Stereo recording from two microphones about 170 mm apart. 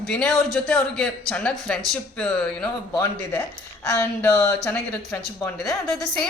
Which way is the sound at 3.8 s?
20° left (ahead or behind).